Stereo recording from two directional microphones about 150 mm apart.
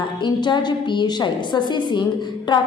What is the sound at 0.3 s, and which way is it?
A woman's voice, 30° left (ahead or behind).